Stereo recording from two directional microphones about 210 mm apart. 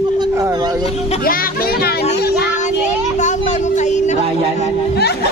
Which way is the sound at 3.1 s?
35° left (ahead or behind).